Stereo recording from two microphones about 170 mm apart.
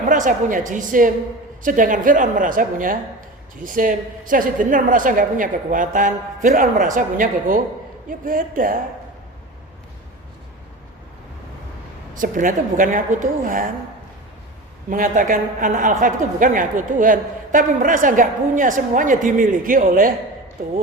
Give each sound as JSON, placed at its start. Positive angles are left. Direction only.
{"t": 0.0, "sound": "speech", "side_deg": -50}
{"t": 12.1, "sound": "speech", "side_deg": -50}
{"t": 14.8, "sound": "speech", "side_deg": -55}